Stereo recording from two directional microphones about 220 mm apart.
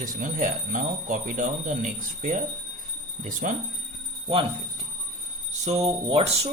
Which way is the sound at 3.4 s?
40° right (ahead or behind).